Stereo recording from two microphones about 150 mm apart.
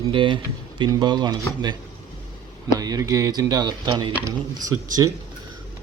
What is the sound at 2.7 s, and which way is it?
Speech, 25° right (ahead or behind).